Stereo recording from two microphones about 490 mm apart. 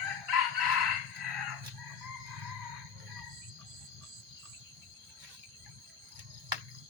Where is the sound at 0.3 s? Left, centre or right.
Right.